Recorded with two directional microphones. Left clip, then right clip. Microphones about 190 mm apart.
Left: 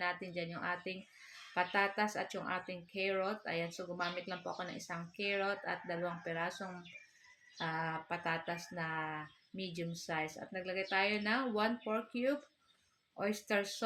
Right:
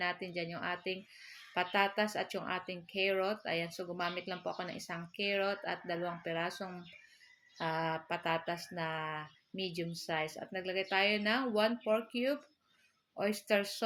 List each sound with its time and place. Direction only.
0.0 s speech: 45° right (ahead or behind)